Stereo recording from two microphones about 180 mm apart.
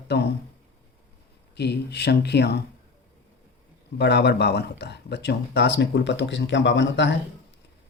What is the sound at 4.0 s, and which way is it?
Speech, 70° left (ahead or behind).